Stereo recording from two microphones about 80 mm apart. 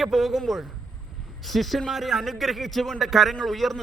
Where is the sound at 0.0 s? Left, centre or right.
Centre.